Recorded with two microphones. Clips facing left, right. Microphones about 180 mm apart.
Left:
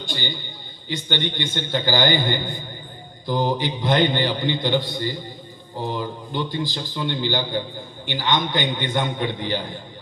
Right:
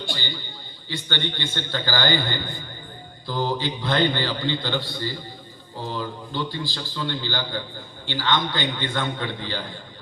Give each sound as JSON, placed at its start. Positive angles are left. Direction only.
{"t": 0.1, "sound": "a man's voice", "side_deg": 15}